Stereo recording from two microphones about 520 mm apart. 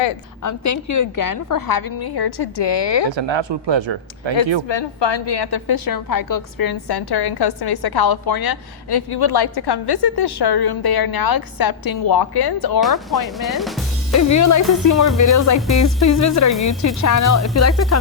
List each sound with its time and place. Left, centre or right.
0.4 s a woman's voice: left
3.1 s speech: right
4.7 s a woman's voice: left
12.8 s speech: centre
14.1 s a woman's voice: left